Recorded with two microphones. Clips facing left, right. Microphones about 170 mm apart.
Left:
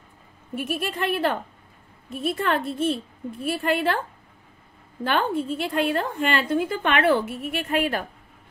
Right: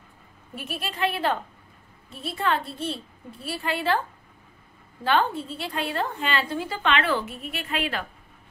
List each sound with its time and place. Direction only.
0.6 s a woman's voice: 50° left (ahead or behind)
5.0 s a woman's voice: 50° left (ahead or behind)
7.6 s a woman's voice: 45° left (ahead or behind)